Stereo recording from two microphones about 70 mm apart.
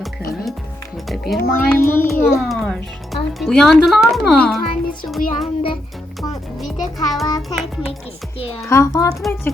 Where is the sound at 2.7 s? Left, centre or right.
Centre.